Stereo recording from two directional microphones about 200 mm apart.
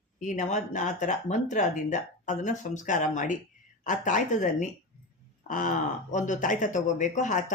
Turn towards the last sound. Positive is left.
turn(degrees=40)  # may be behind; listen again after turning